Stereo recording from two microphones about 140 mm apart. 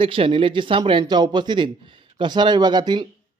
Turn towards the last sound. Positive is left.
turn(degrees=-30)  # may be behind; listen again after turning